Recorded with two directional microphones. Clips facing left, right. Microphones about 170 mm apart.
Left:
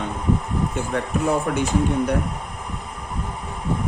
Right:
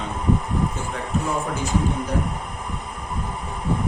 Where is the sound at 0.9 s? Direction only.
65° left (ahead or behind).